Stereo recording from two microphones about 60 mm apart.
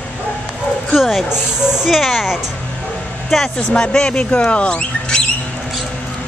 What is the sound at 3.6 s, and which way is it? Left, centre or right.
Speech, centre.